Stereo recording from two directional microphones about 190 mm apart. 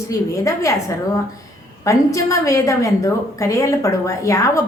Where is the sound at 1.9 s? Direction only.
15° left (ahead or behind).